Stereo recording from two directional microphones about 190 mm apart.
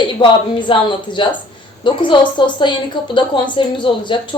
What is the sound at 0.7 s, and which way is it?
Speech, 25° left (ahead or behind).